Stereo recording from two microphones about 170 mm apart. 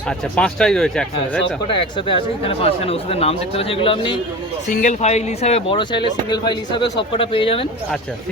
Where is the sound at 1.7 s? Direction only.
30° left (ahead or behind).